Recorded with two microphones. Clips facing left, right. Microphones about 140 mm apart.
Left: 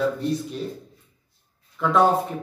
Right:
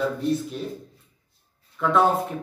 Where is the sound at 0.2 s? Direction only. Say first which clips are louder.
Right 1 dB; centre (ahead or behind).